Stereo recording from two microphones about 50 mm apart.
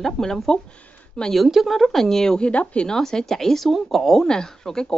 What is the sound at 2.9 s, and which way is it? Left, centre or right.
Speech, centre.